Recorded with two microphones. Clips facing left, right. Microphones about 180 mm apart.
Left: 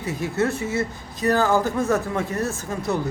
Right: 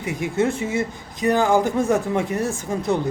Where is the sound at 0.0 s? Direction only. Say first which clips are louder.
Right 2 dB; 15° right (ahead or behind).